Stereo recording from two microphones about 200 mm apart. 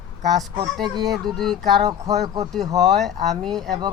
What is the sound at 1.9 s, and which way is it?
Speech, 20° right (ahead or behind).